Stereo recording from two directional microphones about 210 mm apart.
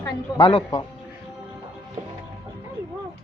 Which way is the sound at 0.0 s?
25° left (ahead or behind).